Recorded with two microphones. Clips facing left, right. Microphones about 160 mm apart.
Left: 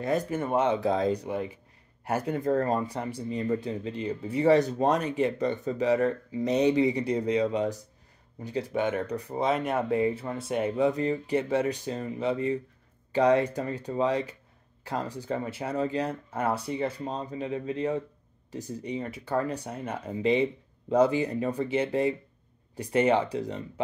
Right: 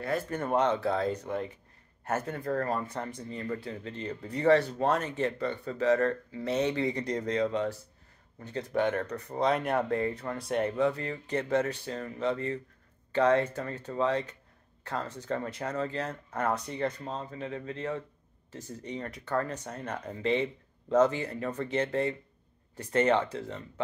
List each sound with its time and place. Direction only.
0.3 s speech: 5° left (ahead or behind)
0.7 s speech: 15° left (ahead or behind)
10.9 s speech: 20° left (ahead or behind)